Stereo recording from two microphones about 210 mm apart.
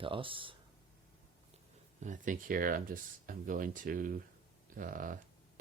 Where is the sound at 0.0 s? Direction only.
25° right (ahead or behind).